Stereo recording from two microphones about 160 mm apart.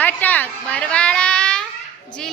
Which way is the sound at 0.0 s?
10° left (ahead or behind).